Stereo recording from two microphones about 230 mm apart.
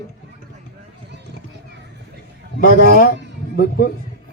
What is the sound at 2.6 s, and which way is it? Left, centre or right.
Speech, left.